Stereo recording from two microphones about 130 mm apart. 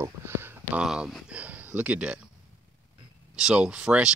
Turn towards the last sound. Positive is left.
turn(degrees=-5)  # may be behind; listen again after turning